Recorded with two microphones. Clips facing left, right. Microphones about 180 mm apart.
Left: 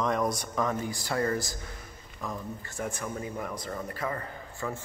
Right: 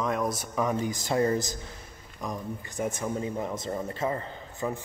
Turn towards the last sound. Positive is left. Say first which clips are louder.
# right 3 dB
turn(degrees=-20)  # may be behind; listen again after turning